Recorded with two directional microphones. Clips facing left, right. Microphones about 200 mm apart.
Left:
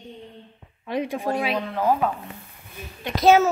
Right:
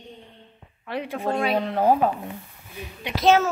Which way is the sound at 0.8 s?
15° left (ahead or behind).